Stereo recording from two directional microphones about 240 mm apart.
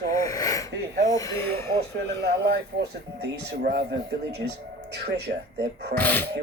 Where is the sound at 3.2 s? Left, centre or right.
Right.